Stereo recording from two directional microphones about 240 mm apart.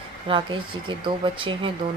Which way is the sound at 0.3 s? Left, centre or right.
Right.